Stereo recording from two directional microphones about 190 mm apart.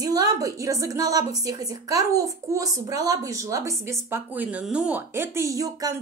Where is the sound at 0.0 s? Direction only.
20° right (ahead or behind).